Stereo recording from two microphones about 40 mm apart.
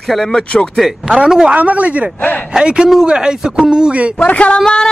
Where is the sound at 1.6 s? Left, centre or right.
Right.